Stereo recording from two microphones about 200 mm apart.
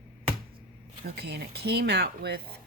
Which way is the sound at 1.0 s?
55° right (ahead or behind).